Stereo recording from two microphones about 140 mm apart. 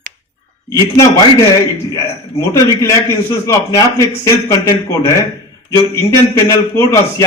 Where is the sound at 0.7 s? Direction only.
20° left (ahead or behind).